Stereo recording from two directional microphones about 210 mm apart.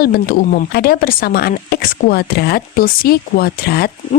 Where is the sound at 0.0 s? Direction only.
45° left (ahead or behind).